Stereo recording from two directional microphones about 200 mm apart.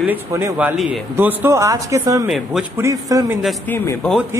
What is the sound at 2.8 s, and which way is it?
Speech, 15° right (ahead or behind).